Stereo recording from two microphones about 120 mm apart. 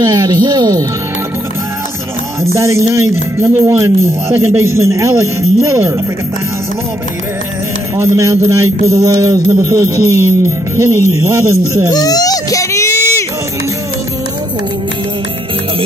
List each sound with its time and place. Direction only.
0.0 s speech: 30° right (ahead or behind)
2.4 s music: 25° right (ahead or behind)
8.0 s music: 25° right (ahead or behind)
11.9 s baby cry: 30° left (ahead or behind)